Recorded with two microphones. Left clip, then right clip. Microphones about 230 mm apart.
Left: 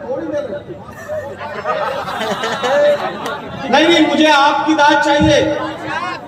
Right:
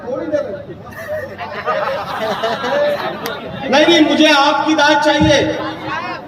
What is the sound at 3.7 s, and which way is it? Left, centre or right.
A man's voice, right.